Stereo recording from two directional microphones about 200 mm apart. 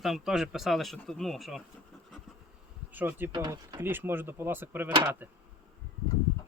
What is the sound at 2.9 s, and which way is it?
Speech, 10° right (ahead or behind).